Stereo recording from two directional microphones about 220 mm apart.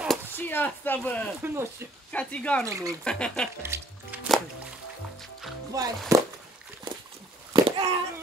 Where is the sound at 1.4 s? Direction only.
10° right (ahead or behind).